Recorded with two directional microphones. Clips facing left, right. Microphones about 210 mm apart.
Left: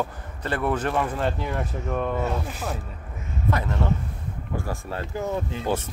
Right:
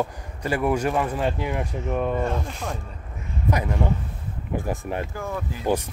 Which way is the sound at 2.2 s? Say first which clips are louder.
Right 1 dB; 5° left (ahead or behind).